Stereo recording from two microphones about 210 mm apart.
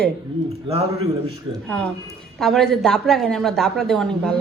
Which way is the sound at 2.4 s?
Centre (ahead or behind).